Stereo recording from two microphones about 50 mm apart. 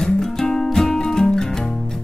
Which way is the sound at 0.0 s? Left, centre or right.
Centre.